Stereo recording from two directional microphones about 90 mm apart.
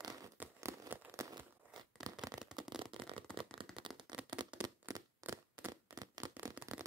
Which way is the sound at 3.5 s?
70° right (ahead or behind).